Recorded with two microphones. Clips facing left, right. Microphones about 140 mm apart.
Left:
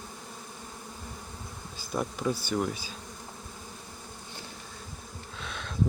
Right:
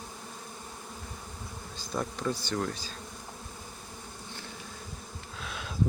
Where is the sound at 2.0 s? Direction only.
10° left (ahead or behind).